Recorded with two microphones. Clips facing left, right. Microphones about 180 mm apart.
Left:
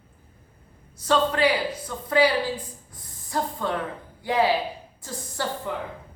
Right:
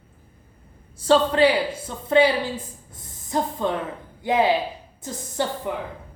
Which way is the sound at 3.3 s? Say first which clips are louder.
Right 3 dB; 20° right (ahead or behind).